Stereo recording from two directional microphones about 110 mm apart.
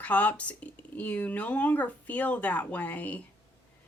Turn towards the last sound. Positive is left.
turn(degrees=15)  # may be behind; listen again after turning